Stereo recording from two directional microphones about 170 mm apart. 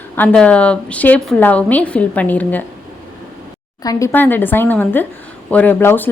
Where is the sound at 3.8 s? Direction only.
20° left (ahead or behind).